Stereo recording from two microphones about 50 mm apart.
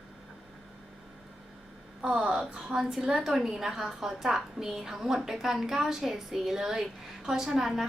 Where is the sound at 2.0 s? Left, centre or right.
Right.